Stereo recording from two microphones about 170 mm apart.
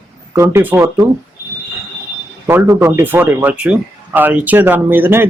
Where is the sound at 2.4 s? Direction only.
20° right (ahead or behind).